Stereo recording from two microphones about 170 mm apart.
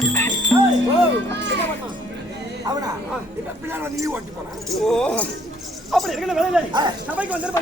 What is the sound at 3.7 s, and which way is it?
Speech, 15° right (ahead or behind).